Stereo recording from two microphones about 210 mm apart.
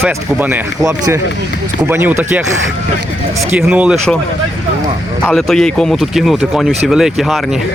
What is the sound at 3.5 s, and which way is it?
Speech, 5° right (ahead or behind).